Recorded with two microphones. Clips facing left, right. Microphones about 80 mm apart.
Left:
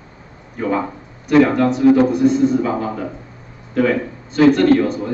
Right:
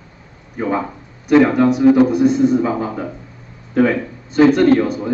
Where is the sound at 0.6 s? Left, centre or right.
Centre.